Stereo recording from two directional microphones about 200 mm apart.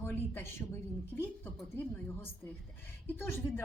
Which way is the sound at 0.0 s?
10° left (ahead or behind).